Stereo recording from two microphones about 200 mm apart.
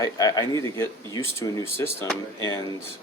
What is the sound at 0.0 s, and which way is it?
Speech, 15° left (ahead or behind).